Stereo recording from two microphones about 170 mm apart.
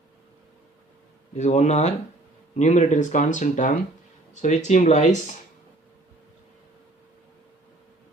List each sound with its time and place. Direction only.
1.4 s speech: 40° left (ahead or behind)